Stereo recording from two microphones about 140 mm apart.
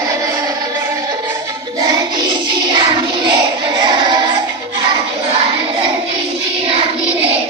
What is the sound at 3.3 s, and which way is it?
Child singing, 30° right (ahead or behind).